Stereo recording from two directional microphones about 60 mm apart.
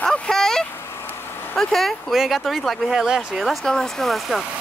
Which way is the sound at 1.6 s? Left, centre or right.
Centre.